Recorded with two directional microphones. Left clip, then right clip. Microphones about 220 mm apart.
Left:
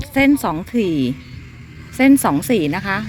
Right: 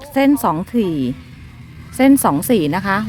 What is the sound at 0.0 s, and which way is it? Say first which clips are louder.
A woman's voice: right 1 dB; 5° right (ahead or behind).